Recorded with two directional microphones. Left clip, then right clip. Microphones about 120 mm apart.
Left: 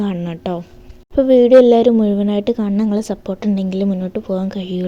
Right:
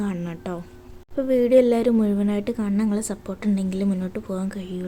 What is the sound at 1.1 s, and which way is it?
Speech, 35° left (ahead or behind).